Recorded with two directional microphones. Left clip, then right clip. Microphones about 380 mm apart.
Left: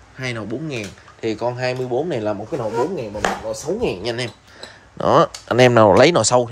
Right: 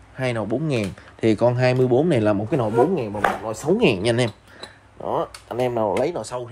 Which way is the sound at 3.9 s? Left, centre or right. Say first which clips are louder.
Right 3 dB; centre.